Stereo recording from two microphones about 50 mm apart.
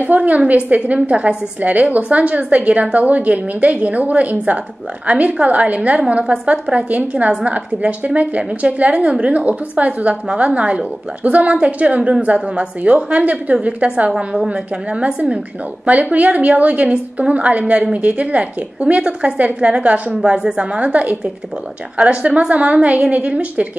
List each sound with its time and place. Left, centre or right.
0.0 s a woman's voice: right
14.1 s a woman's voice: centre
20.2 s a woman's voice: centre
20.5 s a woman's voice: right